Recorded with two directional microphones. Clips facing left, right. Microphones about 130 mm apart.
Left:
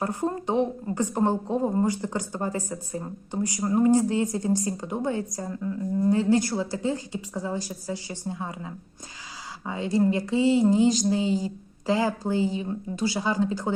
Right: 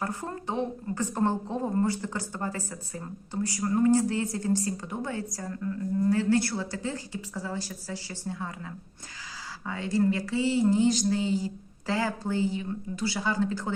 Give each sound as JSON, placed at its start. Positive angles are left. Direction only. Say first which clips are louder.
{"t": 0.0, "sound": "a woman's voice", "louder": "left 6 dB", "side_deg": 20}